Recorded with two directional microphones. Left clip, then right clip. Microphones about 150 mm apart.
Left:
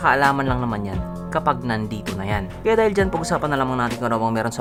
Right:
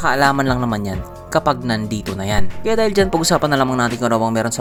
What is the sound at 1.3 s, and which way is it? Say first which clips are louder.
Speech: right 4 dB; 35° right (ahead or behind).